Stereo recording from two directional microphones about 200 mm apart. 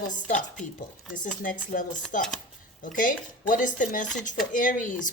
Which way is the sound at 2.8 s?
40° left (ahead or behind).